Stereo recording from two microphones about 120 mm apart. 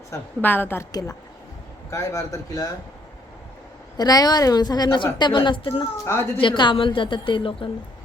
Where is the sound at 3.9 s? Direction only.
35° left (ahead or behind).